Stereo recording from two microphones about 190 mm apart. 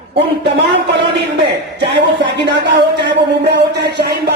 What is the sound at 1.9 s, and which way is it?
Speech, 65° right (ahead or behind).